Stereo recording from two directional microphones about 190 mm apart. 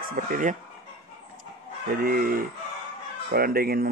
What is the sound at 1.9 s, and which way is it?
Speech, 50° right (ahead or behind).